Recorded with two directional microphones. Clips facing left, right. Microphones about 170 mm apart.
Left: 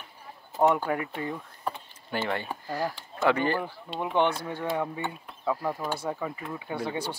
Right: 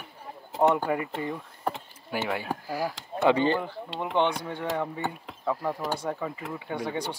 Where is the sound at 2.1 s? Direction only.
10° right (ahead or behind).